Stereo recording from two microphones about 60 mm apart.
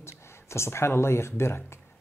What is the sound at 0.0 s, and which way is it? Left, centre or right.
Speech, left.